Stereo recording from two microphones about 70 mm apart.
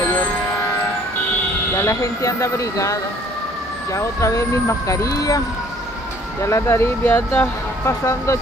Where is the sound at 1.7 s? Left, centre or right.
Left.